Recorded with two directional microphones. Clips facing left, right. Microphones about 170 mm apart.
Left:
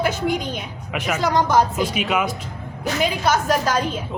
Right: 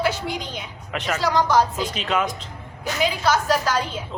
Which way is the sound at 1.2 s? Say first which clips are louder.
Left 1 dB; 50° left (ahead or behind).